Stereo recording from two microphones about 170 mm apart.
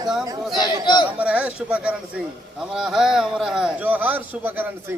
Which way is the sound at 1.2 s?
10° right (ahead or behind).